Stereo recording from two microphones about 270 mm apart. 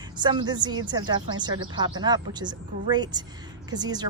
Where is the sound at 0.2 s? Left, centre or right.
Centre.